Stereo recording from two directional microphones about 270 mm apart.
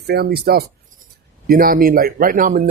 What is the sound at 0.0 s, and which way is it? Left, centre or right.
Speech, right.